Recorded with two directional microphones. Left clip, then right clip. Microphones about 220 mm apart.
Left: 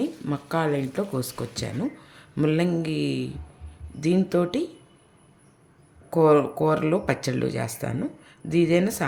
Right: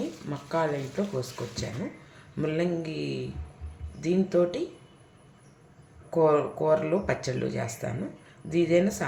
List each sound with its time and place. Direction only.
0.3 s speech: 45° left (ahead or behind)
6.1 s speech: 50° left (ahead or behind)